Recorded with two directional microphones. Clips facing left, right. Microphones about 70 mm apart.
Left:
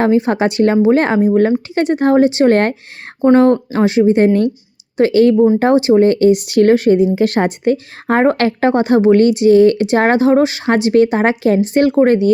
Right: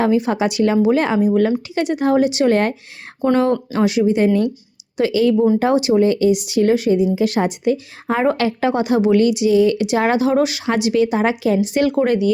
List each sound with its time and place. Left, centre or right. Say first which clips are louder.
0.0 s speech: left 4 dB; left
3.2 s speech: left 6 dB; left